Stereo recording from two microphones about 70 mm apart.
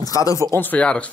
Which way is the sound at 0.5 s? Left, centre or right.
Left.